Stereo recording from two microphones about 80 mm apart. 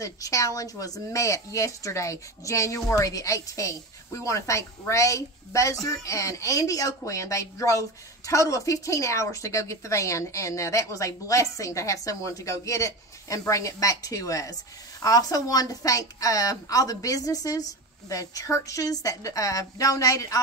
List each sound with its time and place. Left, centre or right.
0.0 s a woman's voice: left